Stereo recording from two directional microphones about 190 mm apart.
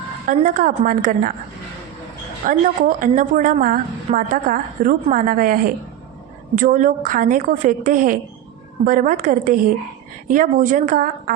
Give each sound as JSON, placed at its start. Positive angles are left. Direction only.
{"t": 0.3, "sound": "a woman's voice", "side_deg": -45}
{"t": 2.5, "sound": "a woman's voice", "side_deg": -45}